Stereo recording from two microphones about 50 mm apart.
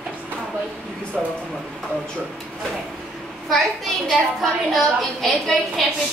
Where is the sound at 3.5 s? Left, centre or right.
Centre.